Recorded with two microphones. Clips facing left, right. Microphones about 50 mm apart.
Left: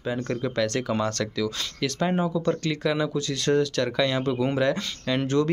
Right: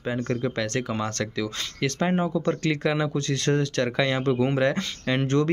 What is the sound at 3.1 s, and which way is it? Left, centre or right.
Speech, right.